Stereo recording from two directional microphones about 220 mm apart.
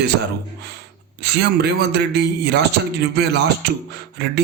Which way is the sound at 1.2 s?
50° right (ahead or behind).